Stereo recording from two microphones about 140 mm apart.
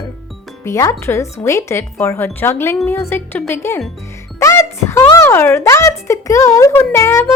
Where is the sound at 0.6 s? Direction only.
20° left (ahead or behind).